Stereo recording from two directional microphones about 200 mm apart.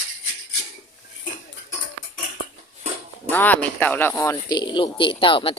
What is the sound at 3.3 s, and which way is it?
Speech, 10° left (ahead or behind).